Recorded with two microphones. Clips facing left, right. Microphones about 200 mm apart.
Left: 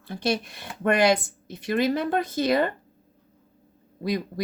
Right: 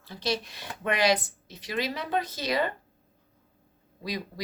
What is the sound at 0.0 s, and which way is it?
Speech, 55° left (ahead or behind).